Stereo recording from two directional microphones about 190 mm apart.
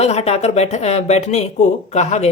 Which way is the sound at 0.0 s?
35° left (ahead or behind).